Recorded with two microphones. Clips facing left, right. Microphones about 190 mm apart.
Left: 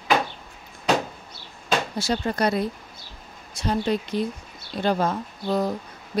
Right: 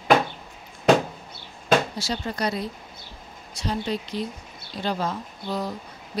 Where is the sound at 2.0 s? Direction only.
55° left (ahead or behind).